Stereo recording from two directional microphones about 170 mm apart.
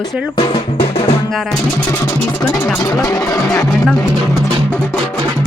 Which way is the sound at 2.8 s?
20° left (ahead or behind).